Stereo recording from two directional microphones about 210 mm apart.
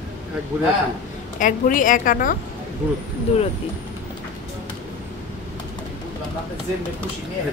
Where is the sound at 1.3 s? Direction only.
40° left (ahead or behind).